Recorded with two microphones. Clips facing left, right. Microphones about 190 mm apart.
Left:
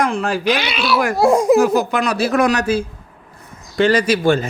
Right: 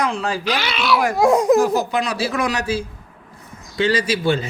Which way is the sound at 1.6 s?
75° left (ahead or behind).